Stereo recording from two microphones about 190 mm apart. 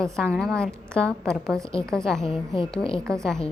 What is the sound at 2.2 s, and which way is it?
Speech, 25° left (ahead or behind).